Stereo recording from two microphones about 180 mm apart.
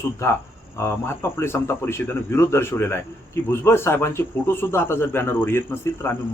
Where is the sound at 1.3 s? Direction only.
15° left (ahead or behind).